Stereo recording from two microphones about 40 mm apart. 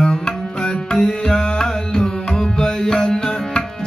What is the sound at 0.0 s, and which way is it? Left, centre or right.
Music, centre.